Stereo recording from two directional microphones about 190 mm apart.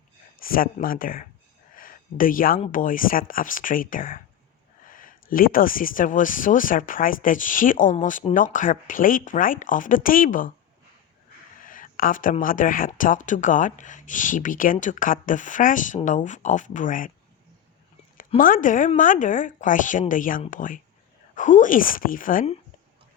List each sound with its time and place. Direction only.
0.3 s speech: 50° left (ahead or behind)
1.7 s a sound: 45° left (ahead or behind)
2.6 s speech: 45° left (ahead or behind)
11.6 s speech: 45° left (ahead or behind)
18.3 s speech: 45° left (ahead or behind)